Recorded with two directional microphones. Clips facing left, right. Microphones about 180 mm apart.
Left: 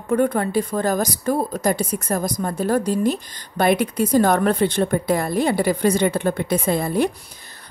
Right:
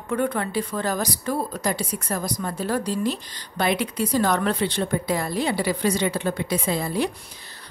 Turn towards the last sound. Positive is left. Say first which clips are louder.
# left 4 dB
turn(degrees=55)  # may be behind; listen again after turning